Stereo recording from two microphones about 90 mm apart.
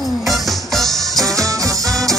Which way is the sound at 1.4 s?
40° right (ahead or behind).